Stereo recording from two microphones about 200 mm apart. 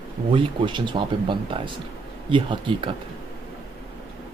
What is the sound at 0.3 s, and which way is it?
Speech, 25° right (ahead or behind).